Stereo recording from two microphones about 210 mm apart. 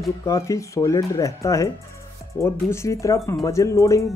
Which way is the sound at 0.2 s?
15° left (ahead or behind).